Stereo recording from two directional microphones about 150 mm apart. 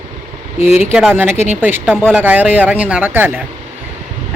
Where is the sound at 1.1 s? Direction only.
15° right (ahead or behind).